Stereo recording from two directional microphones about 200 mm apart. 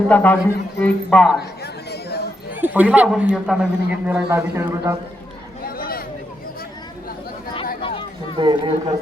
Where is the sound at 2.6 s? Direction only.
10° right (ahead or behind).